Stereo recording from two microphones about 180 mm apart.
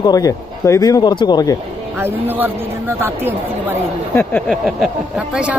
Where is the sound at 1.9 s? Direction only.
10° right (ahead or behind).